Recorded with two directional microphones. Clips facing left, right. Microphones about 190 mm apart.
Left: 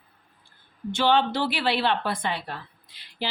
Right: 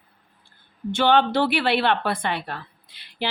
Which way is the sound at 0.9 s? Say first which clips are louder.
Right 3 dB; 55° right (ahead or behind).